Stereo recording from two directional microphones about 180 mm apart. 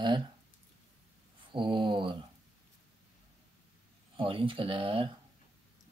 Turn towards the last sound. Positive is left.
turn(degrees=-30)  # may be behind; listen again after turning